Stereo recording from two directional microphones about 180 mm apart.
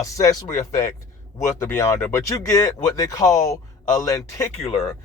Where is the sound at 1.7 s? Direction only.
15° left (ahead or behind).